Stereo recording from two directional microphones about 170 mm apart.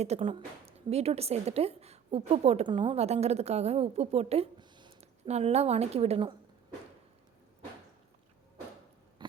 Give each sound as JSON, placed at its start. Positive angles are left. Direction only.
{"t": 0.0, "sound": "a woman's voice", "side_deg": -35}